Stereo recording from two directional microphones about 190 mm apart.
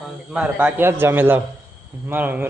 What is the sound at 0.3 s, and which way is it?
Speech, 10° right (ahead or behind).